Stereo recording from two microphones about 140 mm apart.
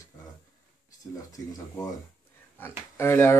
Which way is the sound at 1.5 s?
25° left (ahead or behind).